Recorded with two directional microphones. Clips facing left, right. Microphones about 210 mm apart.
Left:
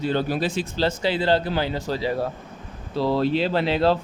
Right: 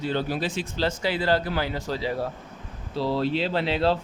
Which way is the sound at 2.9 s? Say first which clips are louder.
Left 4 dB; 50° left (ahead or behind).